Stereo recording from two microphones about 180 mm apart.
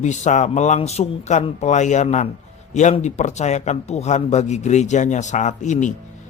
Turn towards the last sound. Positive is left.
turn(degrees=45)  # may be behind; listen again after turning